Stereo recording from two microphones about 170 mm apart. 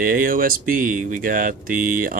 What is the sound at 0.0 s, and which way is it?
Speech, 55° right (ahead or behind).